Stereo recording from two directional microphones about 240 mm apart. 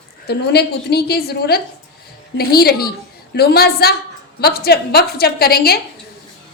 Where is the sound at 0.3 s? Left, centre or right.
Left.